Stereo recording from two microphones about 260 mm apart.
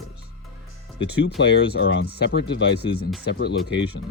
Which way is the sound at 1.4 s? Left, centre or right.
Left.